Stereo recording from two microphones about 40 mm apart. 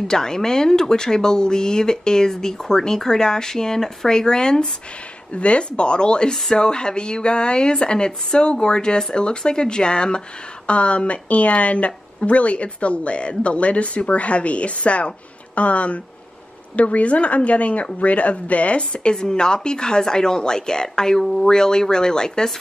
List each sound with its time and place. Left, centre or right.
0.1 s speech: centre
5.3 s speech: left
19.1 s speech: centre